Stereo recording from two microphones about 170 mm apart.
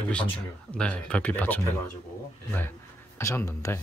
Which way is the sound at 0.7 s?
5° left (ahead or behind).